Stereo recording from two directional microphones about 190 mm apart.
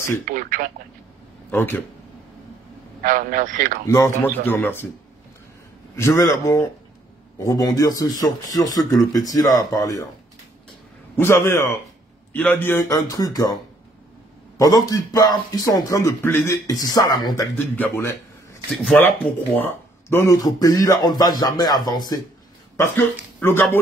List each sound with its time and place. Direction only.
0.2 s telephone: 45° right (ahead or behind)
1.5 s a man's voice: 10° left (ahead or behind)
3.0 s a man's voice: 45° right (ahead or behind)
3.8 s a man's voice: 15° left (ahead or behind)
5.9 s a man's voice: 15° left (ahead or behind)
11.1 s a man's voice: 10° left (ahead or behind)
14.9 s a man's voice: 20° left (ahead or behind)